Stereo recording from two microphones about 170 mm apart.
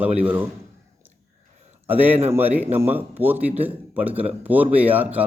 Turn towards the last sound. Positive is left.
turn(degrees=-10)  # may be behind; listen again after turning